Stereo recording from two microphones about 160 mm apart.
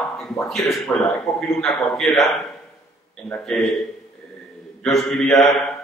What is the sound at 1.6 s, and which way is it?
A man's voice, centre (ahead or behind).